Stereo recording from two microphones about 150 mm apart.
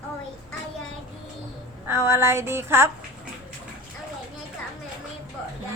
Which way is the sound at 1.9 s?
15° right (ahead or behind).